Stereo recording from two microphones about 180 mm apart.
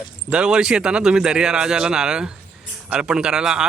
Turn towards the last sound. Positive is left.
turn(degrees=-5)  # may be behind; listen again after turning